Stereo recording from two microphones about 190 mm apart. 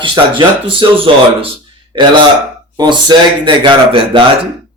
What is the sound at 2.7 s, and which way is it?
Speech, 20° right (ahead or behind).